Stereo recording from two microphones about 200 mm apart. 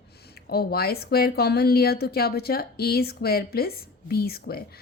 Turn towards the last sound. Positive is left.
turn(degrees=50)  # may be behind; listen again after turning